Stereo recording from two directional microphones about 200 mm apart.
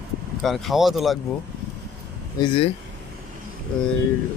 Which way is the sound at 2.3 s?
25° left (ahead or behind).